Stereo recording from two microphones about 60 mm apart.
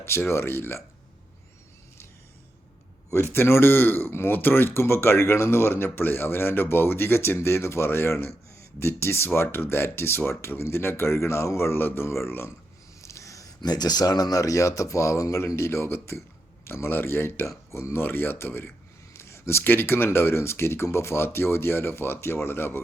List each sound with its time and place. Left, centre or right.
0.0 s speech: left
3.3 s speech: left
13.0 s speech: left
18.0 s speech: left